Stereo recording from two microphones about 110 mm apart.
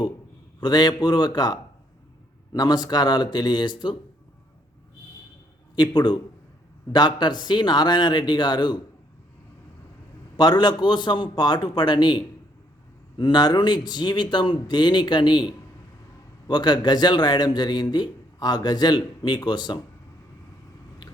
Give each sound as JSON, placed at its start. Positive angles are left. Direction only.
{"t": 0.6, "sound": "a man's voice", "side_deg": 35}
{"t": 5.7, "sound": "a man's voice", "side_deg": 40}
{"t": 10.3, "sound": "a man's voice", "side_deg": 40}